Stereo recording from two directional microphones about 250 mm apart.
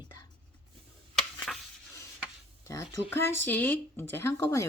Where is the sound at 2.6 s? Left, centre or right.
Centre.